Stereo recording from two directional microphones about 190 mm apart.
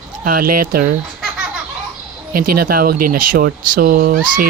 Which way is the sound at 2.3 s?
50° right (ahead or behind).